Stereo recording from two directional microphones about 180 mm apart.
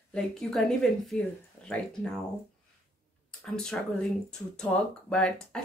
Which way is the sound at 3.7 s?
5° left (ahead or behind).